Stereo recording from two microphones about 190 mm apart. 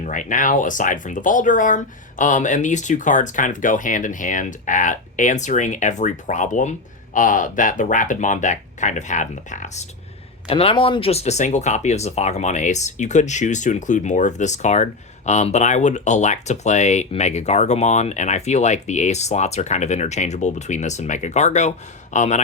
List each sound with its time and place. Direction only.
0.0 s speech: 40° left (ahead or behind)
10.5 s speech: 30° left (ahead or behind)